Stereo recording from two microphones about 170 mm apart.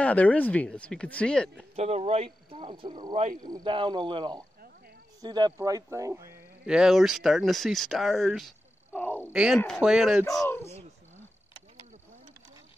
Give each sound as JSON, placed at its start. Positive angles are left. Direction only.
{"t": 0.0, "sound": "speech", "side_deg": 10}
{"t": 1.8, "sound": "speech", "side_deg": -40}
{"t": 3.4, "sound": "speech", "side_deg": -25}
{"t": 6.6, "sound": "speech", "side_deg": -5}
{"t": 9.3, "sound": "speech", "side_deg": -5}
{"t": 10.4, "sound": "speech", "side_deg": 15}